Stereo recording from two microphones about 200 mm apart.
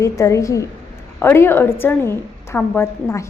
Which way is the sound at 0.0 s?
15° left (ahead or behind).